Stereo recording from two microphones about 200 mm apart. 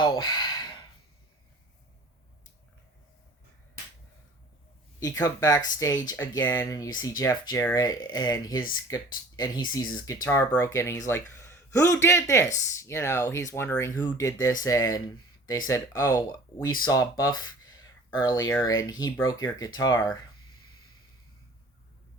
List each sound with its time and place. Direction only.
0.0 s gasp: 20° left (ahead or behind)
4.9 s speech: 15° left (ahead or behind)